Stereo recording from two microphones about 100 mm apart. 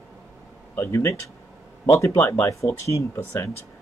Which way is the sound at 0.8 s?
30° left (ahead or behind).